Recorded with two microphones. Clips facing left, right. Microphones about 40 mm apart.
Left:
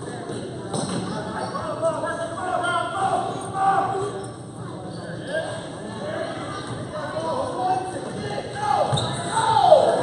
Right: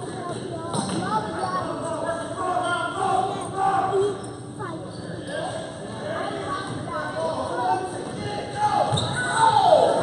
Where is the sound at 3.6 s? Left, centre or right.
Centre.